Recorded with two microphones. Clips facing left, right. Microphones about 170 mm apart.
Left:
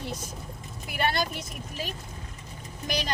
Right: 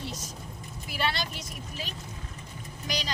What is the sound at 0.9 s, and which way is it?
A woman's voice, 50° left (ahead or behind).